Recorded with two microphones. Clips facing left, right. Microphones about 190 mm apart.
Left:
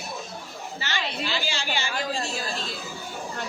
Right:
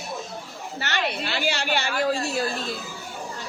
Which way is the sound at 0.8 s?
65° right (ahead or behind).